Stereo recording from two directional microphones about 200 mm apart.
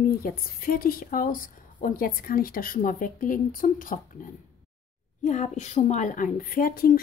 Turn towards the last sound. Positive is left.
turn(degrees=45)  # may be behind; listen again after turning